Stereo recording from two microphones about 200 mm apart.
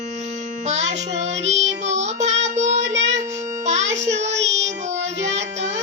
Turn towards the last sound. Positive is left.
turn(degrees=-35)  # may be behind; listen again after turning